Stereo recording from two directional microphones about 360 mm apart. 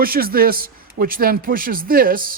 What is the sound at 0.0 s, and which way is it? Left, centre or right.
A man's voice, right.